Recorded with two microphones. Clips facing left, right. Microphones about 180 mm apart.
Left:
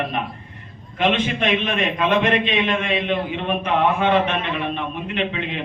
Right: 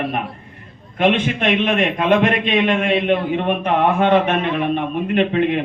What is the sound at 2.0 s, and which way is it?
A man's voice, 50° right (ahead or behind).